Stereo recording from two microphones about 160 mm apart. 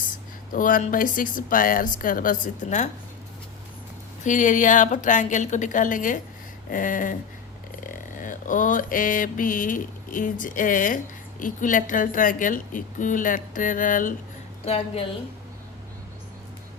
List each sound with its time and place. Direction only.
0.5 s mantra: 60° left (ahead or behind)
4.2 s a woman's voice: 50° left (ahead or behind)
6.7 s mantra: 55° left (ahead or behind)
14.6 s a woman's voice: 40° left (ahead or behind)